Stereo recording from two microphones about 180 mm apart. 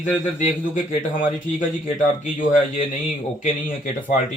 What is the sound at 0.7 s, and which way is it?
Speech, 45° left (ahead or behind).